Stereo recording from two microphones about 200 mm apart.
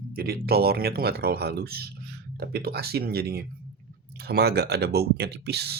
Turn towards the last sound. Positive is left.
turn(degrees=-55)  # may be behind; listen again after turning